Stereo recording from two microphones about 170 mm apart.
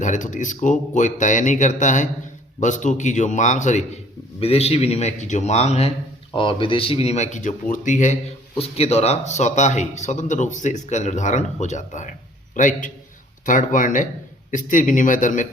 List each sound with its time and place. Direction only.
0.0 s a man's voice: 45° left (ahead or behind)
6.3 s speech: 30° left (ahead or behind); by 15.4 s 50° left (ahead or behind)